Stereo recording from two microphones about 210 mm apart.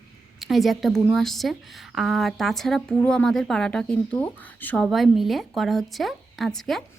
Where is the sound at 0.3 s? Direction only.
Centre (ahead or behind).